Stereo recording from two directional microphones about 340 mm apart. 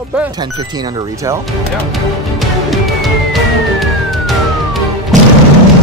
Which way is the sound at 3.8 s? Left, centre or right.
Centre.